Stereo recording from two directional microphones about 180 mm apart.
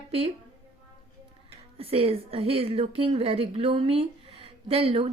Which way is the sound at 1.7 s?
30° right (ahead or behind).